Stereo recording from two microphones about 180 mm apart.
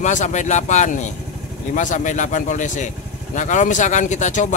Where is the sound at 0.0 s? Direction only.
40° left (ahead or behind).